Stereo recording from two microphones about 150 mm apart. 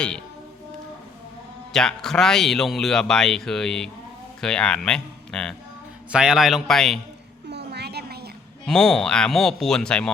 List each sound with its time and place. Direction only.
1.7 s speech: 5° left (ahead or behind)
6.1 s speech: 5° right (ahead or behind)
7.5 s a sound: 90° right
8.6 s speech: 5° left (ahead or behind)